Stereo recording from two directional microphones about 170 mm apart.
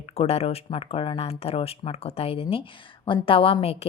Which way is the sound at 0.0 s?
35° left (ahead or behind).